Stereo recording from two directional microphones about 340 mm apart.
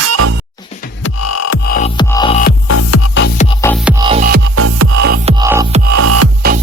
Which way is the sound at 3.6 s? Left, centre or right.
Centre.